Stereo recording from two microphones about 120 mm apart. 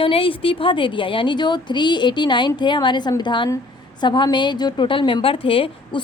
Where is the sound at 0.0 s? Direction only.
50° left (ahead or behind).